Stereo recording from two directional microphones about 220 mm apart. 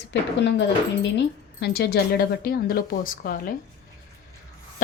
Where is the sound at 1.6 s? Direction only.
45° left (ahead or behind).